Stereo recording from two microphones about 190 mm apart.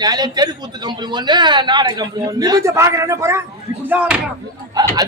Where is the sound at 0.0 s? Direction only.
20° right (ahead or behind).